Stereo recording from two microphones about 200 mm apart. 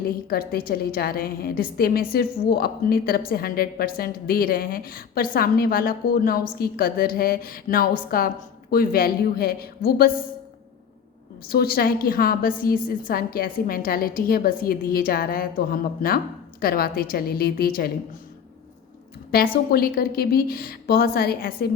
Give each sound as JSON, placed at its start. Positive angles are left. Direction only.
{"t": 0.3, "sound": "a woman's voice", "side_deg": 50}
{"t": 11.4, "sound": "a woman's voice", "side_deg": 50}
{"t": 19.3, "sound": "a woman's voice", "side_deg": 50}